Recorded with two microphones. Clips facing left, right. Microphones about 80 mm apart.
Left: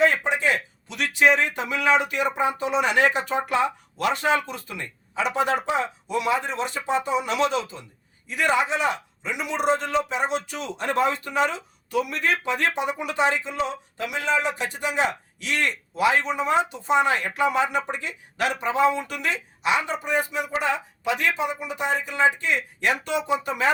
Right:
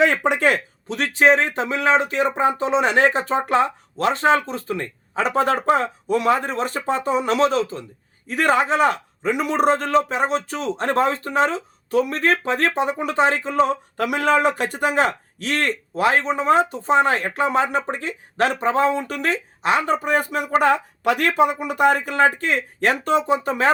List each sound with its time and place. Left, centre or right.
0.0 s speech: right
0.9 s speech: right
13.9 s speech: right